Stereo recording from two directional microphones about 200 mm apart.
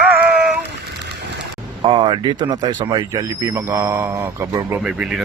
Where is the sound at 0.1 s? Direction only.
5° right (ahead or behind).